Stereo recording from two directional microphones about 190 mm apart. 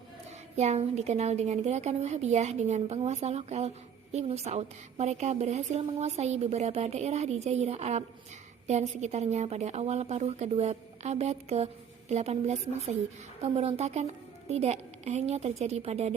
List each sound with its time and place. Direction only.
0.5 s a woman's voice: 35° right (ahead or behind)